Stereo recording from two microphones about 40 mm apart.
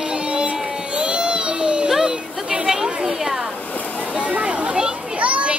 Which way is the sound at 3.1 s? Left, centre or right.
Centre.